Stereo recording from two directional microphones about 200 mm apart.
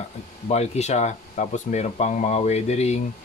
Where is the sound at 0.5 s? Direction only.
35° left (ahead or behind).